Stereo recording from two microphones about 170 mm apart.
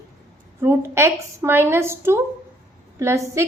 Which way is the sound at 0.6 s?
15° right (ahead or behind).